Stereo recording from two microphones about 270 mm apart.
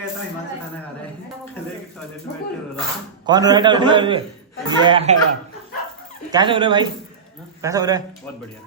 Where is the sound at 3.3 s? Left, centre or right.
Centre.